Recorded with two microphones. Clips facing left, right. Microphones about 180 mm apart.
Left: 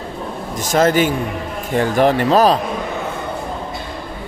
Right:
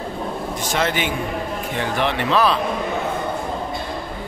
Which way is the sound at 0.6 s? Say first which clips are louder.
Left 9 dB; 45° left (ahead or behind).